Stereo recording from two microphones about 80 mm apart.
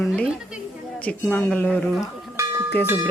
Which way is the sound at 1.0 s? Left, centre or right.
Centre.